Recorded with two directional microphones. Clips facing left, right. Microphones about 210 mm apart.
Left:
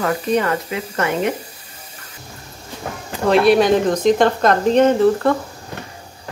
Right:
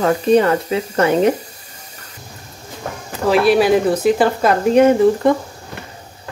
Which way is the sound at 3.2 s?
Centre (ahead or behind).